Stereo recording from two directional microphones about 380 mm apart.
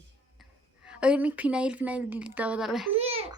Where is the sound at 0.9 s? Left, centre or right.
Centre.